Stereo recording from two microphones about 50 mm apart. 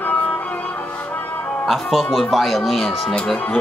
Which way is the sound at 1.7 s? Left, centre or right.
Centre.